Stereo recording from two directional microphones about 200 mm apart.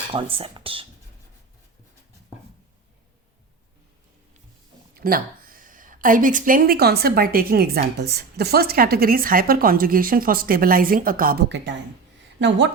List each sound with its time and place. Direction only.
0.1 s speech: 25° right (ahead or behind)
4.9 s speech: 45° right (ahead or behind); by 12.7 s 60° right (ahead or behind)